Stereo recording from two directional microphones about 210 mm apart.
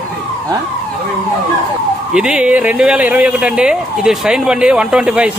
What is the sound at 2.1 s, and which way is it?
Speech, 5° right (ahead or behind).